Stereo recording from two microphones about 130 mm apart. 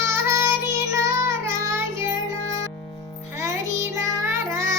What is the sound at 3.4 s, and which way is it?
Music, 25° right (ahead or behind).